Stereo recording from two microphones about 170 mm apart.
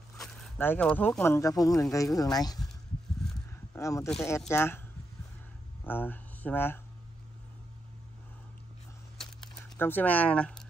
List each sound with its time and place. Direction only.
0.6 s speech: 10° left (ahead or behind)
3.7 s speech: 20° left (ahead or behind)
5.9 s speech: 10° left (ahead or behind)
9.8 s speech: 10° left (ahead or behind)